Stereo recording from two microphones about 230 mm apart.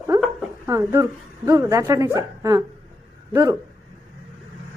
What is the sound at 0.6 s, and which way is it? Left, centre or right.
Speech, centre.